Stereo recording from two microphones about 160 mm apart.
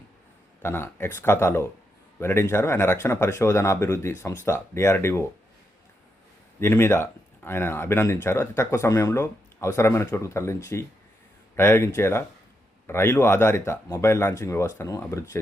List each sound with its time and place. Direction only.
0.6 s speech: 15° left (ahead or behind)
6.6 s speech: 15° left (ahead or behind)